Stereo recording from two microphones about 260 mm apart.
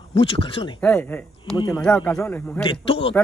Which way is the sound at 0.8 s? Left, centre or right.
Centre.